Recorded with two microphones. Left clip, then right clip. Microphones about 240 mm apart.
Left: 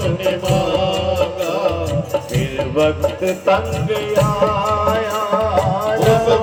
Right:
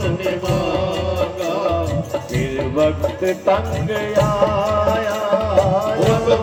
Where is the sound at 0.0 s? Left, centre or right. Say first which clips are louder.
Left 2 dB; left.